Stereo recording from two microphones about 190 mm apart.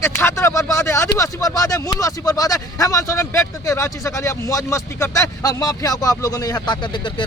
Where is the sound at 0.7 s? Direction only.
15° left (ahead or behind).